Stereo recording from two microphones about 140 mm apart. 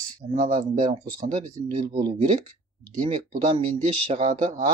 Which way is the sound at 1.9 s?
40° right (ahead or behind).